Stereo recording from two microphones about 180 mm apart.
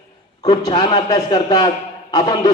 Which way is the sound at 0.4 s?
20° left (ahead or behind).